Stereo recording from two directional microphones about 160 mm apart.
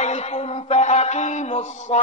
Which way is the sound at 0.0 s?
45° left (ahead or behind).